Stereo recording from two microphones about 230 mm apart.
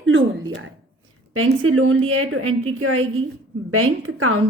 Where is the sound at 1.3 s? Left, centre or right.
Right.